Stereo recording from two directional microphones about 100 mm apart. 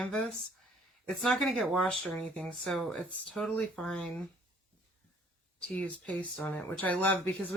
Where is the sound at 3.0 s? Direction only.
15° left (ahead or behind).